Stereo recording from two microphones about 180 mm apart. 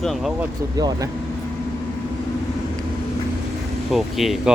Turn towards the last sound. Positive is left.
turn(degrees=0)  # may be behind; listen again after turning